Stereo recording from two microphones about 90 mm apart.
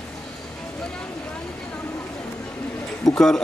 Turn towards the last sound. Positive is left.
turn(degrees=5)  # may be behind; listen again after turning